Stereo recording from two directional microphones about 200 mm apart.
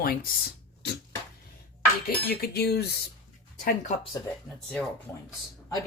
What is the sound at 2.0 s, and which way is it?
Speech, 50° left (ahead or behind).